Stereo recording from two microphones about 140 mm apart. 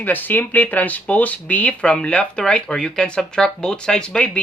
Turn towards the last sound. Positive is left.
turn(degrees=5)  # may be behind; listen again after turning